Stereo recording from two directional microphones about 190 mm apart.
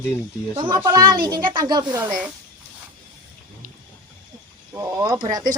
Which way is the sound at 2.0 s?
5° right (ahead or behind).